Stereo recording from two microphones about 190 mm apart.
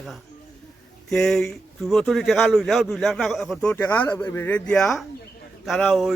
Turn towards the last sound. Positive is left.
turn(degrees=0)  # may be behind; listen again after turning